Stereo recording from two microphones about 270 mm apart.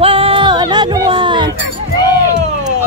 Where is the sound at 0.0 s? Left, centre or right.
Centre.